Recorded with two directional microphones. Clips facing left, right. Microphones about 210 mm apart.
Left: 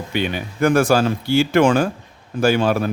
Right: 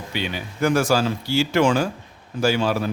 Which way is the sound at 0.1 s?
55° left (ahead or behind).